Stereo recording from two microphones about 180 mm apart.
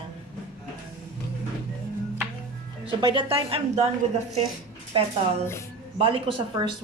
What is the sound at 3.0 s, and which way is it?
Speech, 25° right (ahead or behind).